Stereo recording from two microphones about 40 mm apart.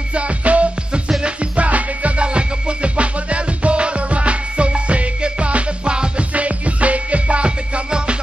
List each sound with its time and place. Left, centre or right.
0.1 s music: right